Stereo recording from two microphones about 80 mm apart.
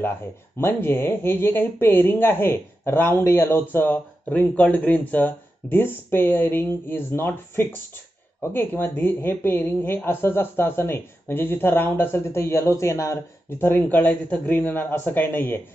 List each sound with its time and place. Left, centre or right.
0.6 s speech: left
13.6 s speech: left